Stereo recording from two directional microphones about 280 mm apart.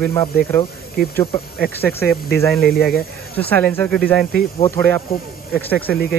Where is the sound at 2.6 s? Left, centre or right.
Left.